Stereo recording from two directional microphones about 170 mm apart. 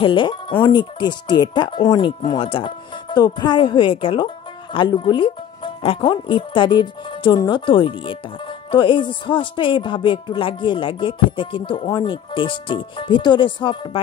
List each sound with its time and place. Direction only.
0.0 s speech: 30° left (ahead or behind)